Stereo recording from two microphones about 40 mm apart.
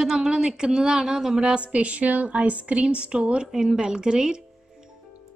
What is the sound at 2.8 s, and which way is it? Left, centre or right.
A woman's voice, right.